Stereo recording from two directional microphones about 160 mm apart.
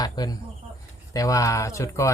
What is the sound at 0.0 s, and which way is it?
Cricket, 25° left (ahead or behind).